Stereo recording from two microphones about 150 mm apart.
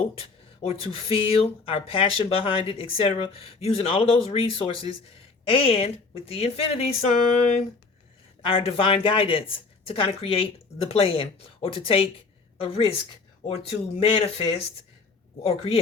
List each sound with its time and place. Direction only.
0.2 s speech: 40° left (ahead or behind)
15.4 s speech: 40° left (ahead or behind)